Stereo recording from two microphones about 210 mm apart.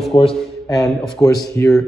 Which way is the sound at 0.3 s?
Centre (ahead or behind).